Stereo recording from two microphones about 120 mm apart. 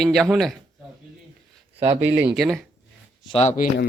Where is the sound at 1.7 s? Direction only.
60° right (ahead or behind).